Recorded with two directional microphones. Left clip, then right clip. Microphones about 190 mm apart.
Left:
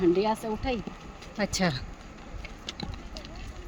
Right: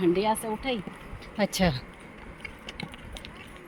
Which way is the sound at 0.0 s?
20° right (ahead or behind).